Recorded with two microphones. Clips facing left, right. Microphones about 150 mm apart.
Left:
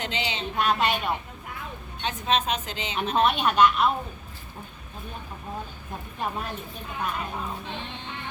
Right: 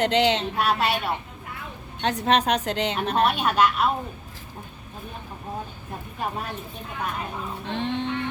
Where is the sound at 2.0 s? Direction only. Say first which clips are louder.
Right 5 dB; 70° right (ahead or behind).